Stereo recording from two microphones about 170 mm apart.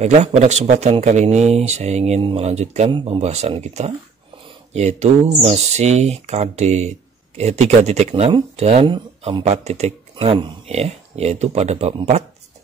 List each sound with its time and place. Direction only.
0.0 s speech: 40° right (ahead or behind)